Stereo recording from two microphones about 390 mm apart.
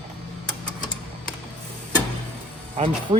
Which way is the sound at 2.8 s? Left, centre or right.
Centre.